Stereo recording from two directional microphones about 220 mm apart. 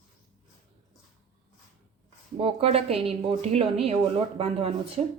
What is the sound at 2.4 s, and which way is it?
Speech, 25° right (ahead or behind).